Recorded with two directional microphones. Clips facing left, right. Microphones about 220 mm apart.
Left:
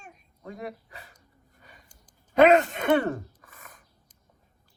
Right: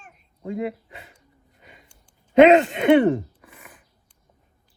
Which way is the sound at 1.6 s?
20° right (ahead or behind).